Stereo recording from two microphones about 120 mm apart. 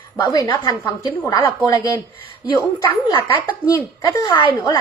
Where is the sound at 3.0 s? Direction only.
45° left (ahead or behind).